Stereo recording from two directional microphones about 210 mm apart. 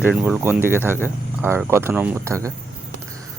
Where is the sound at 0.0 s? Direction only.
5° right (ahead or behind).